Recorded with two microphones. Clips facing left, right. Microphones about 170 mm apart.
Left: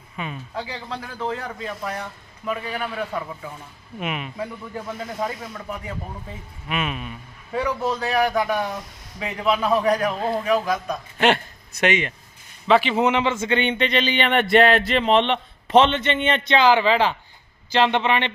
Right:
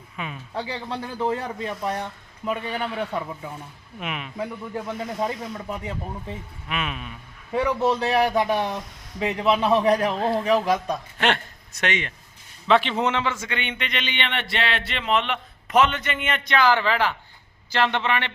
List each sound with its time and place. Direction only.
0.2 s a man's voice: centre (ahead or behind)
0.5 s a man's voice: 30° right (ahead or behind)
4.0 s a man's voice: 5° left (ahead or behind)
4.9 s a man's voice: 20° right (ahead or behind)
6.7 s a man's voice: 5° left (ahead or behind)
7.5 s a man's voice: 20° right (ahead or behind)
10.2 s a man's voice: centre (ahead or behind)
10.4 s a man's voice: 30° right (ahead or behind)
11.8 s a man's voice: 10° left (ahead or behind)
13.2 s speech: 25° left (ahead or behind)